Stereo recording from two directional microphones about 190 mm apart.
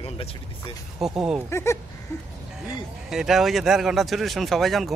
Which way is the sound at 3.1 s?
Centre (ahead or behind).